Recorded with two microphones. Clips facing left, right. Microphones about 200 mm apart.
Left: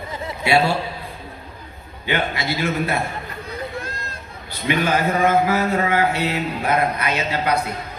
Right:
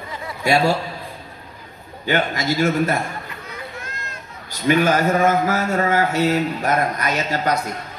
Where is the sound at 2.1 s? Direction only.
45° right (ahead or behind).